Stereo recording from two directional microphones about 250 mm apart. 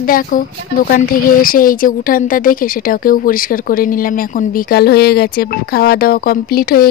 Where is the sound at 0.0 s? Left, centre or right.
Left.